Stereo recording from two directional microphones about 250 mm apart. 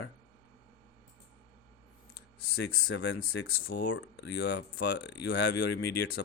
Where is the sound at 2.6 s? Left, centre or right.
Left.